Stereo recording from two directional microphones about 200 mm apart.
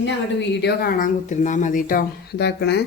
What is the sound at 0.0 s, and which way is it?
A woman's voice, 60° left (ahead or behind).